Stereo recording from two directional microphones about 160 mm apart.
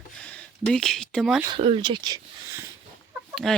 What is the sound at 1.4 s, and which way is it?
Speech, 35° right (ahead or behind).